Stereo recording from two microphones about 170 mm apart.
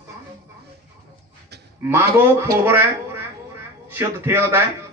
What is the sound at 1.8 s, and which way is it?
Speech, 15° right (ahead or behind).